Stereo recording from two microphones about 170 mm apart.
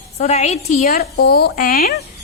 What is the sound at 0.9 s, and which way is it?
Speech, 65° left (ahead or behind).